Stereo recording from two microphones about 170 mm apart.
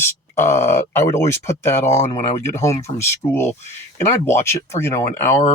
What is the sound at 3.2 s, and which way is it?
Speech, 30° left (ahead or behind).